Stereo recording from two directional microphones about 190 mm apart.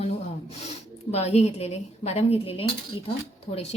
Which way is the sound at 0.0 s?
35° left (ahead or behind).